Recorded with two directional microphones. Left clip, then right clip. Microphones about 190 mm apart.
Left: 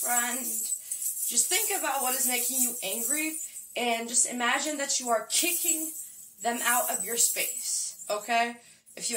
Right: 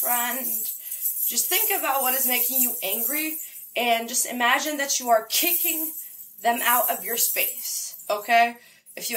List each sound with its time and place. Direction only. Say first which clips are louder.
1.3 s speech: right 3 dB; 10° left (ahead or behind)